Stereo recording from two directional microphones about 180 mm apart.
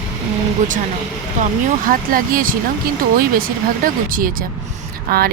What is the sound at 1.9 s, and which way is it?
Speech, 50° right (ahead or behind).